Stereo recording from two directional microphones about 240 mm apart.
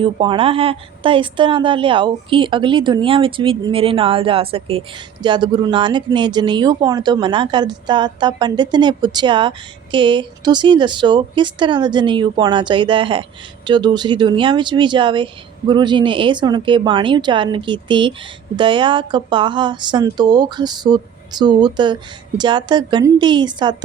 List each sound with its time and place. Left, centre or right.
0.0 s a woman's voice: right